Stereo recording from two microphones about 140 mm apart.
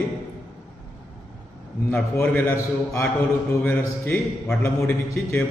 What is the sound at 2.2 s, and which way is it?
A man's voice, 15° left (ahead or behind).